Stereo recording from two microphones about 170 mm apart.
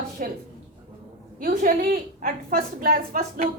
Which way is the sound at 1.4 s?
55° right (ahead or behind).